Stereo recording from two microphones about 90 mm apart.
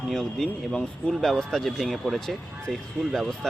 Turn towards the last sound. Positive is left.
turn(degrees=5)  # may be behind; listen again after turning